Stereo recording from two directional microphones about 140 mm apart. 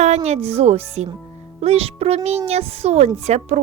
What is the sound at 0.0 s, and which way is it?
A woman's voice, 50° right (ahead or behind).